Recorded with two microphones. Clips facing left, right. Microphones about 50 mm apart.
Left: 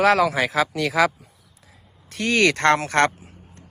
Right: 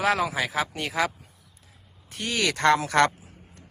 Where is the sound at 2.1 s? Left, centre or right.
Left.